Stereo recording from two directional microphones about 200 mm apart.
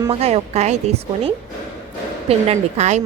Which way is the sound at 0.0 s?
30° right (ahead or behind).